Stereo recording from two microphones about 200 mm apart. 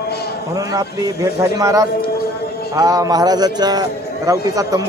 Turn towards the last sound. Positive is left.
turn(degrees=-20)  # may be behind; listen again after turning